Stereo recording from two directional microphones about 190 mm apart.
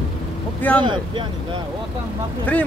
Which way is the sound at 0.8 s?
25° right (ahead or behind).